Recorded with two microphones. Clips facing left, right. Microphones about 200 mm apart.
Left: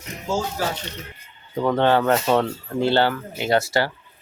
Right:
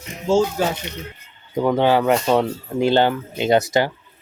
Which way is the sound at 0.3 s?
25° right (ahead or behind).